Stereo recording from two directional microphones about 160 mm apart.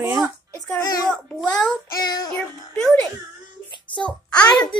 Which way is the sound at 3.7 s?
30° left (ahead or behind).